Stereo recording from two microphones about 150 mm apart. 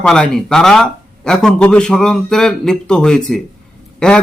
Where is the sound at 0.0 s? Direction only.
5° left (ahead or behind).